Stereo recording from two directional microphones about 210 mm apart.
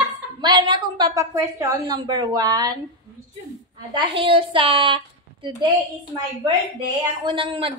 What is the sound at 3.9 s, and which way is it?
A woman's voice, 25° right (ahead or behind).